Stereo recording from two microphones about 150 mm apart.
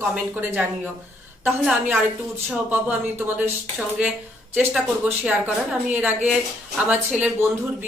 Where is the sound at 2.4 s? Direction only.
10° right (ahead or behind).